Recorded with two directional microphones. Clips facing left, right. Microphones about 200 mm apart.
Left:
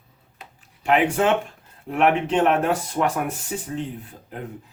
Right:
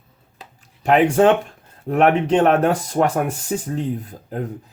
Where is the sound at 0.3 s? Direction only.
40° right (ahead or behind).